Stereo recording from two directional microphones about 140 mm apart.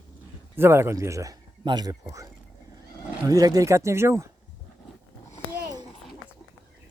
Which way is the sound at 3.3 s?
25° right (ahead or behind).